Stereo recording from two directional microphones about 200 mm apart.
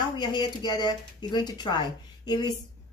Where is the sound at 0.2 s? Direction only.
20° left (ahead or behind).